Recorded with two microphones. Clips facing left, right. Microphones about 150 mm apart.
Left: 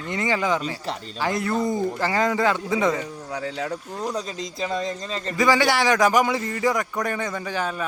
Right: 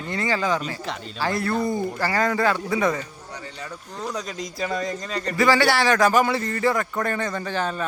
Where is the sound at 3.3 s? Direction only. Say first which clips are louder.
Left 9 dB; 90° left.